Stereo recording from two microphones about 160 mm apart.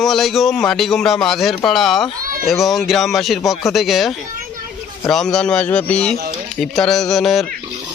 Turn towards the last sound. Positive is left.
turn(degrees=0)  # may be behind; listen again after turning